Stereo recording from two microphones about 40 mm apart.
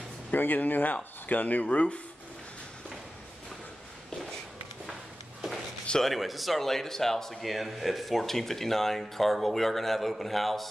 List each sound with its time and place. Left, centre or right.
0.3 s speech: left
6.0 s speech: centre
7.5 s speech: centre